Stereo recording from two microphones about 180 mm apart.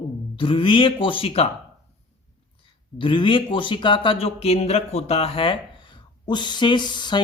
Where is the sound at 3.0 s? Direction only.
25° left (ahead or behind).